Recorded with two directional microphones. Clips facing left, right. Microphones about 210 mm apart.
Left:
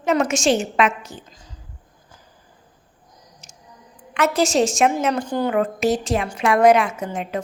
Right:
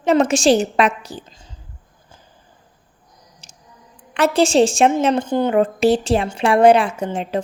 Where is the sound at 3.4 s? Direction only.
30° right (ahead or behind).